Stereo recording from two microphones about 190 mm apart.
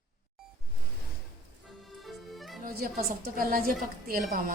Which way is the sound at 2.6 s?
50° right (ahead or behind).